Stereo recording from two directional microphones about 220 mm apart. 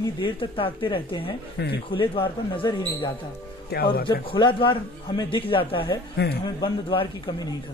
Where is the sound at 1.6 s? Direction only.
50° left (ahead or behind).